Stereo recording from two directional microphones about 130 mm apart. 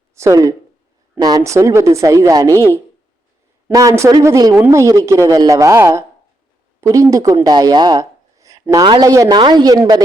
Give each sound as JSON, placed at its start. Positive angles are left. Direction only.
{"t": 0.1, "sound": "a woman's voice", "side_deg": -25}
{"t": 2.5, "sound": "speech", "side_deg": 20}
{"t": 3.7, "sound": "a woman's voice", "side_deg": -25}